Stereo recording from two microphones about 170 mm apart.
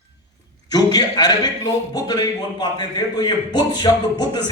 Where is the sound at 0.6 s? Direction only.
25° left (ahead or behind).